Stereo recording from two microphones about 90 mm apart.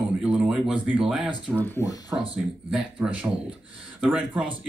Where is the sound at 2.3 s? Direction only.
10° right (ahead or behind).